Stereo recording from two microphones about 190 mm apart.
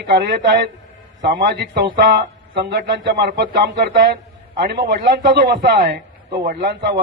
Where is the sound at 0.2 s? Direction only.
60° right (ahead or behind).